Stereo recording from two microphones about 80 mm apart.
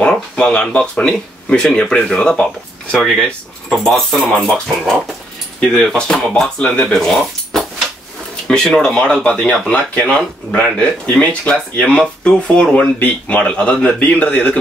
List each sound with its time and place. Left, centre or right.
0.0 s speech: centre